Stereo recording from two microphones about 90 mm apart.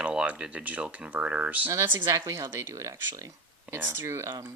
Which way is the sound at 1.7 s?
25° right (ahead or behind).